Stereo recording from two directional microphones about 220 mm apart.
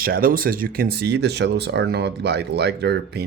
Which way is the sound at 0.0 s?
40° right (ahead or behind).